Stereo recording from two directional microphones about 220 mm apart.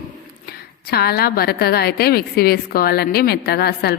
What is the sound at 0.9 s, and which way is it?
A woman's voice, 45° left (ahead or behind).